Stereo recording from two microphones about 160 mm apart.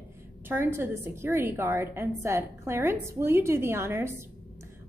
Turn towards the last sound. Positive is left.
turn(degrees=-15)  # may be behind; listen again after turning